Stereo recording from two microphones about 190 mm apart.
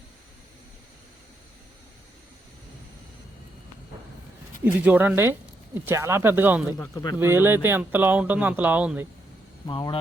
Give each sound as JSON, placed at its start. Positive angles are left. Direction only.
{"t": 4.6, "sound": "speech", "side_deg": -10}
{"t": 6.7, "sound": "speech", "side_deg": 20}
{"t": 7.2, "sound": "speech", "side_deg": -10}
{"t": 9.6, "sound": "speech", "side_deg": 25}